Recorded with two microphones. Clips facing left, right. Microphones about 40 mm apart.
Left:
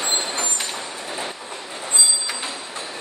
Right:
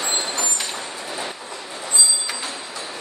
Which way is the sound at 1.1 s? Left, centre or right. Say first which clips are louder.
Even; left.